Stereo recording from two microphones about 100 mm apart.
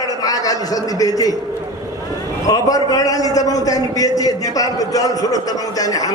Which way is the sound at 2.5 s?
35° left (ahead or behind).